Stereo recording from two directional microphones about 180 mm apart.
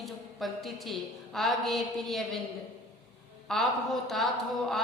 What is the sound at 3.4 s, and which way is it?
A woman's voice, centre (ahead or behind).